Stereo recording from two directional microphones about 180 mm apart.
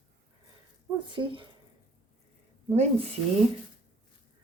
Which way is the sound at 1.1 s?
30° right (ahead or behind).